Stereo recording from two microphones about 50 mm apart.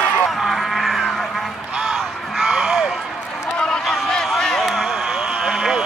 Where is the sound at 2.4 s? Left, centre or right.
Centre.